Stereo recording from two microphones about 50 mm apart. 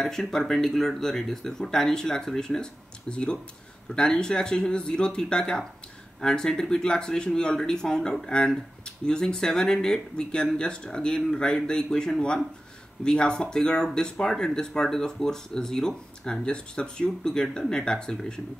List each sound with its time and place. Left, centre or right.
0.0 s speech: centre